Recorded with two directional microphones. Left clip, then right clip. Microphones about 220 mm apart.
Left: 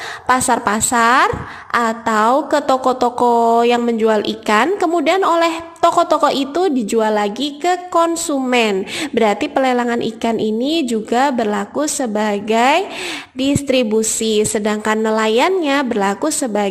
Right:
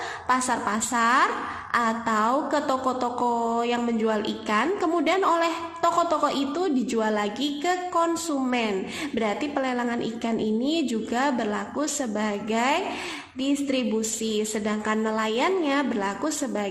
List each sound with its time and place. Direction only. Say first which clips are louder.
0.3 s a woman's voice: left 10 dB; 40° left (ahead or behind)